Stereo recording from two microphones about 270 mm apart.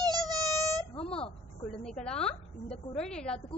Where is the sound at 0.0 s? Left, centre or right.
Centre.